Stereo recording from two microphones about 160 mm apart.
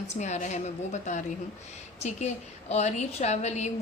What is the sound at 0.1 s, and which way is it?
A woman's voice, 50° left (ahead or behind).